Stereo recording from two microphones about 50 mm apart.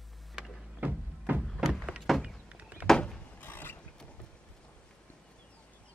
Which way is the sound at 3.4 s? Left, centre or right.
Left.